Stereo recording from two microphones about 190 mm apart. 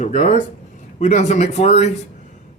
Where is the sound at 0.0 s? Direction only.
40° left (ahead or behind).